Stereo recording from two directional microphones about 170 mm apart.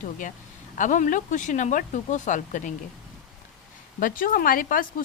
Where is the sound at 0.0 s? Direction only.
50° left (ahead or behind).